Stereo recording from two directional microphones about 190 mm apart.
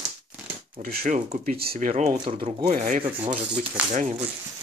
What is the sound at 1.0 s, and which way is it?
Speech, 40° right (ahead or behind).